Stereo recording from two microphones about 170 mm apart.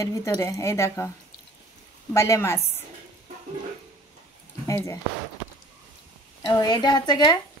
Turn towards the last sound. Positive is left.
turn(degrees=25)  # may be behind; listen again after turning